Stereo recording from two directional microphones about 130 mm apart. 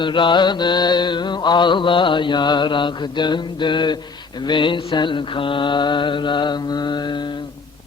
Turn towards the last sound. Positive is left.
turn(degrees=35)  # may be behind; listen again after turning